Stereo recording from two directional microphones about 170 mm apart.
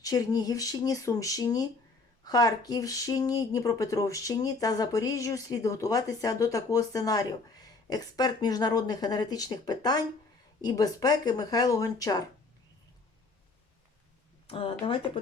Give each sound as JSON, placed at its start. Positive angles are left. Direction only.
{"t": 0.0, "sound": "speech", "side_deg": 20}
{"t": 14.4, "sound": "speech", "side_deg": 35}